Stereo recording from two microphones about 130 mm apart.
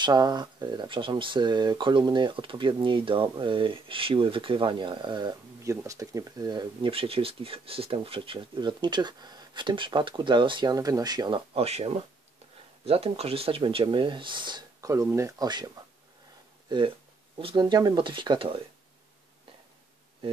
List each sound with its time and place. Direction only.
0.0 s speech: 30° right (ahead or behind)
5.6 s speech: 25° right (ahead or behind)
6.9 s speech: 45° right (ahead or behind)
11.6 s speech: 55° right (ahead or behind); by 14.9 s 35° right (ahead or behind)
14.9 s speech: 20° right (ahead or behind); by 18.6 s 40° right (ahead or behind)